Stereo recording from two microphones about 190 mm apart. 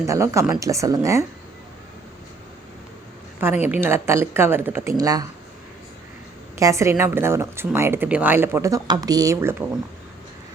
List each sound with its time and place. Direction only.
0.0 s speech: 15° right (ahead or behind)
3.4 s speech: 10° right (ahead or behind)
6.6 s speech: 15° right (ahead or behind)